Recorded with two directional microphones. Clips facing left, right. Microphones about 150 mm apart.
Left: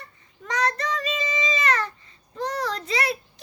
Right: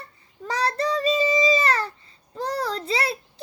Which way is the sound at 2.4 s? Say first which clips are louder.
Right 1 dB; 30° right (ahead or behind).